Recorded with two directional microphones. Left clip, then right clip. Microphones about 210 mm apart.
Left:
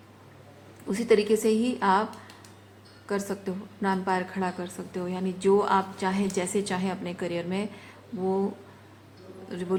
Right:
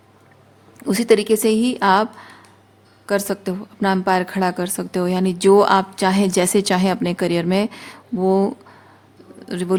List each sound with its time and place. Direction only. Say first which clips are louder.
0.9 s a woman's voice: right 7 dB; 50° right (ahead or behind)
3.1 s a woman's voice: right 10 dB; 45° right (ahead or behind)
9.5 s a woman's voice: right 10 dB; 50° right (ahead or behind)